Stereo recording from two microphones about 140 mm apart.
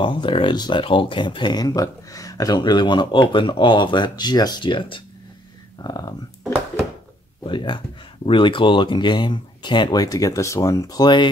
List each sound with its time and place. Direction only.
0.0 s speech: 35° left (ahead or behind)
5.9 s a sound: 30° left (ahead or behind)
7.4 s speech: 35° left (ahead or behind)